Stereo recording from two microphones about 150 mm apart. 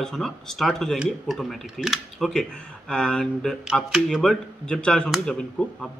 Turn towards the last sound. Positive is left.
turn(degrees=5)  # may be behind; listen again after turning